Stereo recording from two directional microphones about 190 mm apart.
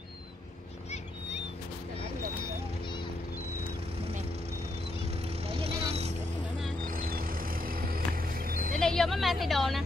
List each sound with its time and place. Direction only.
5.4 s vehicle: 30° right (ahead or behind)
6.9 s vehicle: 50° right (ahead or behind)
8.7 s a sound: centre (ahead or behind)